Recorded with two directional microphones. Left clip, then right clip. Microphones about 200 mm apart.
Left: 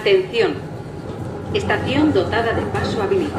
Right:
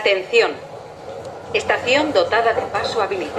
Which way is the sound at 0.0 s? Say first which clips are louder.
Even; 45° right (ahead or behind).